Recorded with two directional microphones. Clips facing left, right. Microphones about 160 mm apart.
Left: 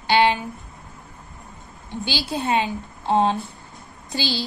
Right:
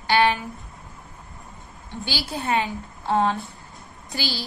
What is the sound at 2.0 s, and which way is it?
A woman's voice, 20° left (ahead or behind).